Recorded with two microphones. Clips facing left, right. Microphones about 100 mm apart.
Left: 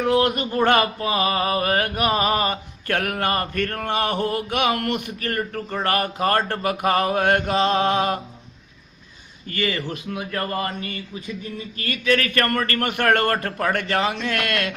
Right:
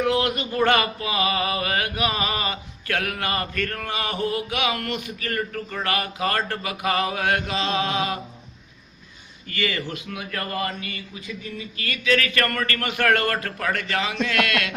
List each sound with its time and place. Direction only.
0.0 s mantra: 35° left (ahead or behind); by 5.3 s 50° left (ahead or behind)
5.3 s mantra: 35° left (ahead or behind)
9.5 s mantra: 35° left (ahead or behind)